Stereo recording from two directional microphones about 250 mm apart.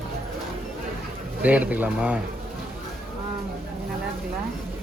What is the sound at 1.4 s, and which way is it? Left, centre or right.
Speech, centre.